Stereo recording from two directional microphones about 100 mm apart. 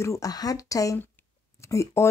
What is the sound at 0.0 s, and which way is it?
Speech, 35° left (ahead or behind).